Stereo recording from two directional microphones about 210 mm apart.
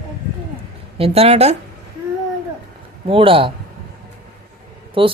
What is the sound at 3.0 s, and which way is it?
Speech, 25° right (ahead or behind).